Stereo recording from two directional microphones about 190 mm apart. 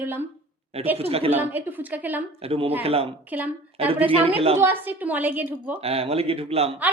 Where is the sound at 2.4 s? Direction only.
30° right (ahead or behind).